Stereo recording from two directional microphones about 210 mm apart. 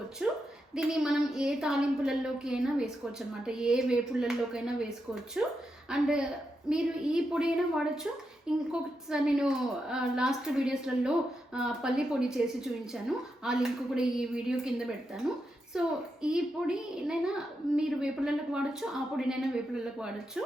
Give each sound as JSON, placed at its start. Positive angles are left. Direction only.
{"t": 0.2, "sound": "a woman's voice", "side_deg": -5}